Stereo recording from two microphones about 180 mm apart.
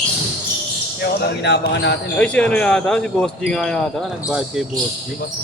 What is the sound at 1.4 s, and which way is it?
Speech, 70° left (ahead or behind).